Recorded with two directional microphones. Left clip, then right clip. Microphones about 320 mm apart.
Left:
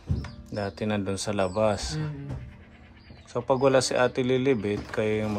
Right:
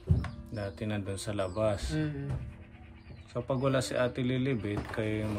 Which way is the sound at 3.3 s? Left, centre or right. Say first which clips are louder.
Left 9 dB; centre.